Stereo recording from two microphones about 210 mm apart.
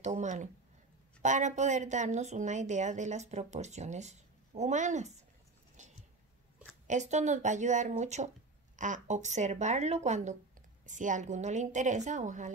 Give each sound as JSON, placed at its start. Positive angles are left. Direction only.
{"t": 0.0, "sound": "a woman's voice", "side_deg": -35}
{"t": 5.8, "sound": "a sound", "side_deg": -35}
{"t": 6.9, "sound": "a woman's voice", "side_deg": -35}